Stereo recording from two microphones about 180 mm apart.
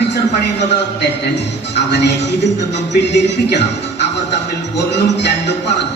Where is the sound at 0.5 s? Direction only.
70° left (ahead or behind).